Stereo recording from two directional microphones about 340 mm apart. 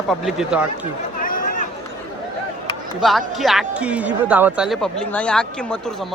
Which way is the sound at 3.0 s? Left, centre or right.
Centre.